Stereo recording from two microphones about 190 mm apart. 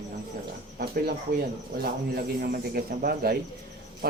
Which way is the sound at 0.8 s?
50° right (ahead or behind).